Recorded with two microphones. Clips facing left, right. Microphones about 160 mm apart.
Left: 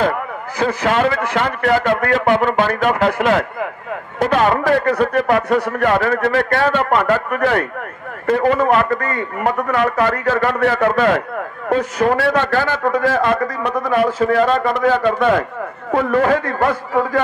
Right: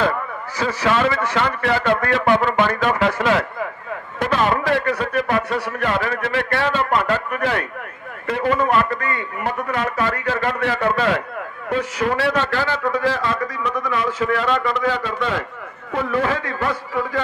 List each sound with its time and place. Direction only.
0.0 s a man's voice: 50° left (ahead or behind)